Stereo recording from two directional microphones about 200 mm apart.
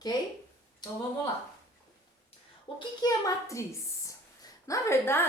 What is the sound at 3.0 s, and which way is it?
Speech, 20° left (ahead or behind).